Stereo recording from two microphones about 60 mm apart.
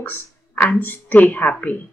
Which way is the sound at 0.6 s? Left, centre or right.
Left.